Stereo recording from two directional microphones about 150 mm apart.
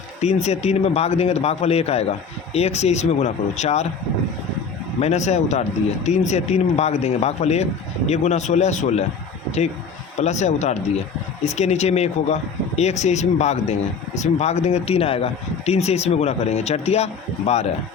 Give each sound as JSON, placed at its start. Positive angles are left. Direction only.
{"t": 0.2, "sound": "speech", "side_deg": 45}
{"t": 4.9, "sound": "speech", "side_deg": 50}
{"t": 10.2, "sound": "speech", "side_deg": 50}